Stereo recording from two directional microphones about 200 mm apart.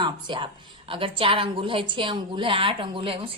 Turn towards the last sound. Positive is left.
turn(degrees=-25)  # may be behind; listen again after turning